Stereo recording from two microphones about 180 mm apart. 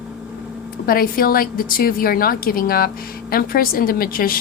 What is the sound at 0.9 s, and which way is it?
A woman's voice, 55° left (ahead or behind).